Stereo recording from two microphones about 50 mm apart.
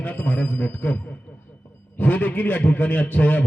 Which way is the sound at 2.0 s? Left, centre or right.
Left.